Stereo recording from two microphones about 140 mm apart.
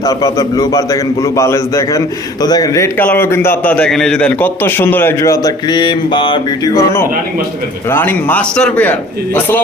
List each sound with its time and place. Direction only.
0.0 s a man's voice: 25° left (ahead or behind)
7.9 s a man's voice: 15° left (ahead or behind)